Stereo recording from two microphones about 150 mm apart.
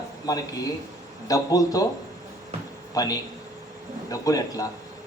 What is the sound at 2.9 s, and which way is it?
A man's voice, 25° left (ahead or behind).